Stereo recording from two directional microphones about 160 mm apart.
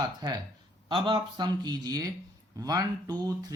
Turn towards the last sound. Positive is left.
turn(degrees=-25)  # may be behind; listen again after turning